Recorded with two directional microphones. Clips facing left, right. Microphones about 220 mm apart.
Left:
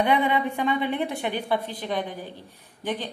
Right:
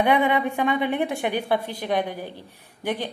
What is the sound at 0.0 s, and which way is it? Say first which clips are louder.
A woman's voice: right 2 dB; 15° right (ahead or behind).